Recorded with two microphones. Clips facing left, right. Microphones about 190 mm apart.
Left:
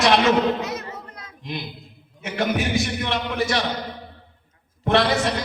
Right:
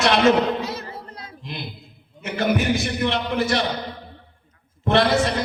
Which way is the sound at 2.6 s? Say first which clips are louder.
Right 2 dB; 60° right (ahead or behind).